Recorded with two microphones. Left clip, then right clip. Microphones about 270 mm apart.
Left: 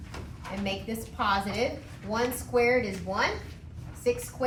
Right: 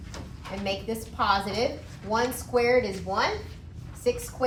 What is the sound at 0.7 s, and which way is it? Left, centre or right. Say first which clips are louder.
A woman's voice: right 5 dB; centre.